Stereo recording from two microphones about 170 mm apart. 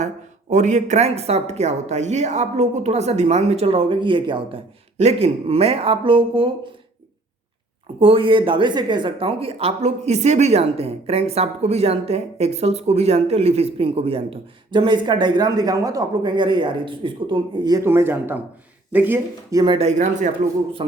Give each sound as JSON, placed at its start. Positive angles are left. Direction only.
{"t": 0.5, "sound": "speech", "side_deg": -45}
{"t": 7.9, "sound": "speech", "side_deg": -30}
{"t": 19.9, "sound": "speech", "side_deg": -45}